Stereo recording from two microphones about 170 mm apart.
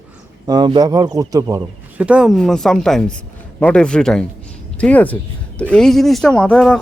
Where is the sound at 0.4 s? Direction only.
25° right (ahead or behind).